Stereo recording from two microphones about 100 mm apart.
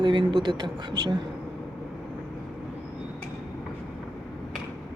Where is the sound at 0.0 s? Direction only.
50° right (ahead or behind).